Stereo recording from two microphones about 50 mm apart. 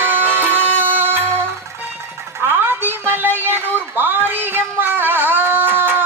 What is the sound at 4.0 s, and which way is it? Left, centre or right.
Music, right.